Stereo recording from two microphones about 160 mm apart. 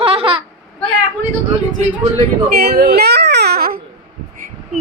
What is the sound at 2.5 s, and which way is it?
Baby cry, 80° right.